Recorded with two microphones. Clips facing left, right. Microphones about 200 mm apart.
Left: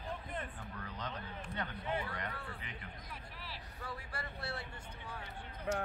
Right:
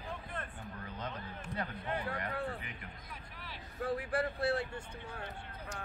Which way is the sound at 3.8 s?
50° right (ahead or behind).